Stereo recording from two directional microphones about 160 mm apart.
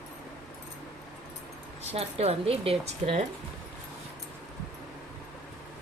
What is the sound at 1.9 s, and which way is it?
A woman's voice, 40° right (ahead or behind).